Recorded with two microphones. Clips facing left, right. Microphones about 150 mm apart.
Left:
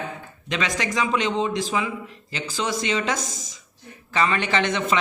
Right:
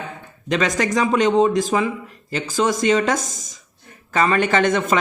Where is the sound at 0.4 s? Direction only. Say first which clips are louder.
Right 6 dB; 45° right (ahead or behind).